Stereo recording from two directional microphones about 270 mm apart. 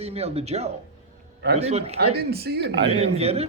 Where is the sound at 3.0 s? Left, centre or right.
Right.